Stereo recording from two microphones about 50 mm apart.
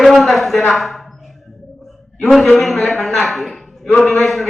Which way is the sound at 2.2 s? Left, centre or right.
Centre.